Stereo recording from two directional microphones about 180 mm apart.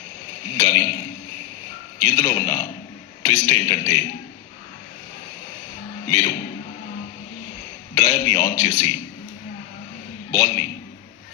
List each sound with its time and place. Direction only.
0.4 s a sound: 15° left (ahead or behind)
2.1 s a man's voice: 15° left (ahead or behind)
6.1 s a man's voice: 15° left (ahead or behind)
7.9 s a man's voice: 15° left (ahead or behind)
10.3 s a man's voice: 15° left (ahead or behind)